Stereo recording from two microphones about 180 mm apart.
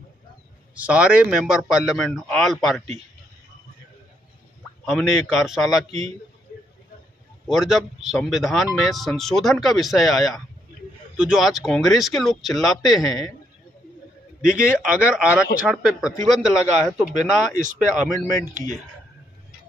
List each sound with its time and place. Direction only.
0.7 s speech: 5° right (ahead or behind)
4.8 s speech: centre (ahead or behind)
7.4 s speech: centre (ahead or behind)
14.4 s speech: 5° right (ahead or behind)
17.2 s speech: 45° right (ahead or behind)